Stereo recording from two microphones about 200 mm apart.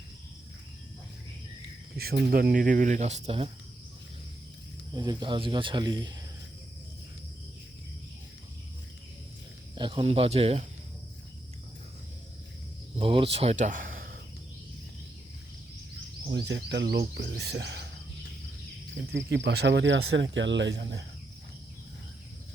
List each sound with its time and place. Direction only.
2.0 s speech: 50° right (ahead or behind); by 3.5 s 30° right (ahead or behind)
4.9 s speech: 20° right (ahead or behind)
9.7 s speech: 25° right (ahead or behind)
13.0 s speech: 25° right (ahead or behind); by 14.2 s 45° right (ahead or behind)
16.3 s speech: 60° right (ahead or behind)
19.1 s speech: 60° right (ahead or behind)